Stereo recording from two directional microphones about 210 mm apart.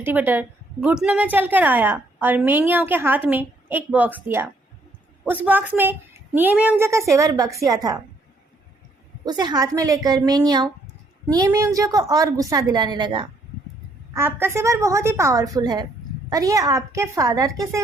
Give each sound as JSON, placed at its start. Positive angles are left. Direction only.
{"t": 0.0, "sound": "a woman's voice", "side_deg": -10}
{"t": 9.2, "sound": "a woman's voice", "side_deg": -20}
{"t": 14.1, "sound": "a woman's voice", "side_deg": -10}